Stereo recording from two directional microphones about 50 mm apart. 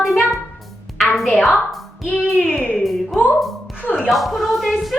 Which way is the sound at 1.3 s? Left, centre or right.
Centre.